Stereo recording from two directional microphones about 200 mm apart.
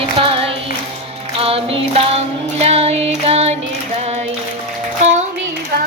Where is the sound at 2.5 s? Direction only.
30° right (ahead or behind).